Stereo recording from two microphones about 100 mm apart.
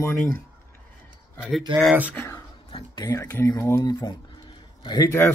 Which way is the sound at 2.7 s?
45° left (ahead or behind).